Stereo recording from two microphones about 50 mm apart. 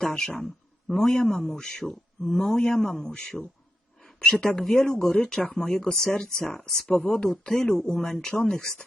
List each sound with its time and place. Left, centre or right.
0.0 s speech: centre